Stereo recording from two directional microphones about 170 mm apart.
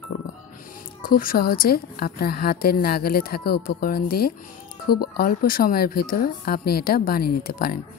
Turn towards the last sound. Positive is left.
turn(degrees=60)  # may be behind; listen again after turning